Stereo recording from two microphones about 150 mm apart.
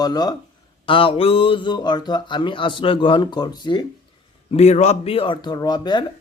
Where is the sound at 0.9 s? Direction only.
35° left (ahead or behind).